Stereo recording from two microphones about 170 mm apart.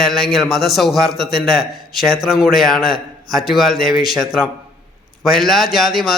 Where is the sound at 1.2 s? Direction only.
65° left (ahead or behind).